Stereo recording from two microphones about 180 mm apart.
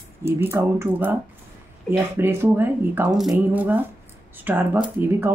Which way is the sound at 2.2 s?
15° right (ahead or behind).